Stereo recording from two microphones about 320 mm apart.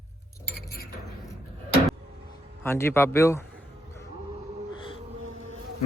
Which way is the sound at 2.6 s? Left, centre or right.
Centre.